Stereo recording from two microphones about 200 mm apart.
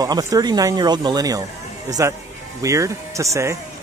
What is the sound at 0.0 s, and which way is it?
Speech, 20° right (ahead or behind).